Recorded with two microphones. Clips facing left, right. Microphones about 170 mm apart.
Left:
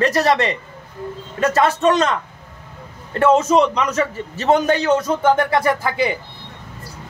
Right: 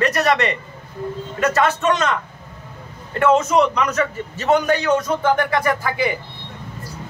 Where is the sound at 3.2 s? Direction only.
25° left (ahead or behind).